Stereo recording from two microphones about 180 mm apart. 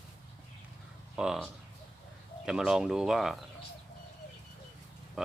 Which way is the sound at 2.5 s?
5° right (ahead or behind).